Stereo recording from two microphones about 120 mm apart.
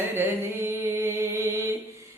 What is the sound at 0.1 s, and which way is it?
Mantra, 20° right (ahead or behind).